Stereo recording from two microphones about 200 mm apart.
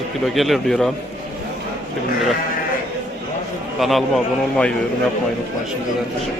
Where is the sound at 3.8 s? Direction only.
Centre (ahead or behind).